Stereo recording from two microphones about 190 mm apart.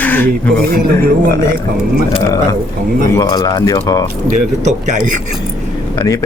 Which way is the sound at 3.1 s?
20° left (ahead or behind).